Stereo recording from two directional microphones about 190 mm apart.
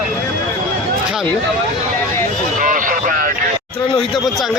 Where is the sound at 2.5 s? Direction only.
45° right (ahead or behind).